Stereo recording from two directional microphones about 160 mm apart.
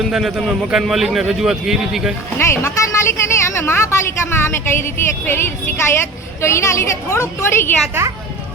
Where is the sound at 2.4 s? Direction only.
15° left (ahead or behind).